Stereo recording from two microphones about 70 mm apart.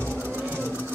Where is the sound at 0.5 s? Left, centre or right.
Right.